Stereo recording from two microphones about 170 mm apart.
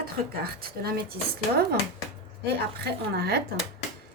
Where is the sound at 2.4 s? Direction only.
70° right (ahead or behind).